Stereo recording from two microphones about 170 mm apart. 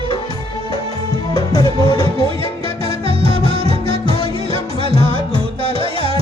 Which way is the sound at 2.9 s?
35° right (ahead or behind).